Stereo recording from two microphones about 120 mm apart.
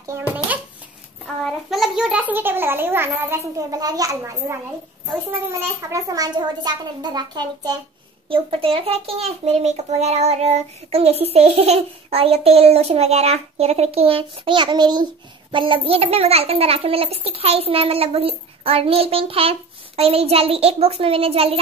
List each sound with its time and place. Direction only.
0.0 s babbling: 20° right (ahead or behind)
1.2 s a child's voice: centre (ahead or behind); by 3.6 s 20° right (ahead or behind)
3.7 s a child's voice: 30° right (ahead or behind)
5.6 s a child's voice: 25° right (ahead or behind)
8.3 s a child's voice: 50° right (ahead or behind)